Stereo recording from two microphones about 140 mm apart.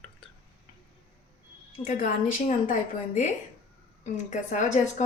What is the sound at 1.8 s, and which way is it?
Speech, 75° left (ahead or behind).